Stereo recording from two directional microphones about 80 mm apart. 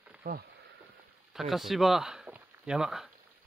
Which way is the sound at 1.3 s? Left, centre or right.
Centre.